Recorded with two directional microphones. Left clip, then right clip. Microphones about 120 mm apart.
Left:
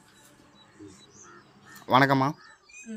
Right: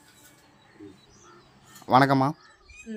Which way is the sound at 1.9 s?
35° right (ahead or behind).